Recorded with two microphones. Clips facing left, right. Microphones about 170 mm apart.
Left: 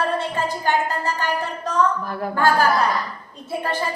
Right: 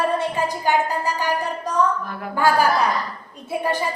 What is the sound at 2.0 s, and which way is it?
Speech, 40° left (ahead or behind).